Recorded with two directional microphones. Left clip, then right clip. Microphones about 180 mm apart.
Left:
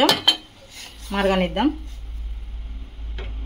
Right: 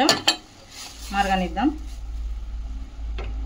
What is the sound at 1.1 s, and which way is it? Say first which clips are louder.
Speech: left 2 dB; 40° left (ahead or behind).